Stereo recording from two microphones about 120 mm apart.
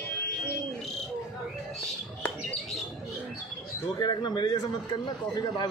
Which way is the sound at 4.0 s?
35° left (ahead or behind).